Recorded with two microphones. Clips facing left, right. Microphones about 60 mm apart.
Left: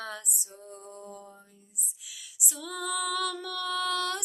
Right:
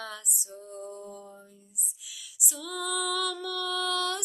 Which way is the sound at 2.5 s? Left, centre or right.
Left.